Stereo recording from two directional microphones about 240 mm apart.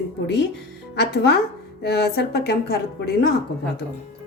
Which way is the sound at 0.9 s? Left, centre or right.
Left.